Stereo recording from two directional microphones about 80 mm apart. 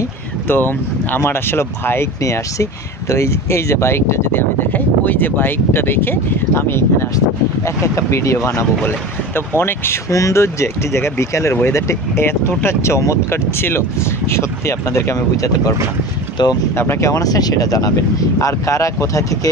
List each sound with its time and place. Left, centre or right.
0.5 s speech: left
16.7 s speech: left
17.1 s speech: left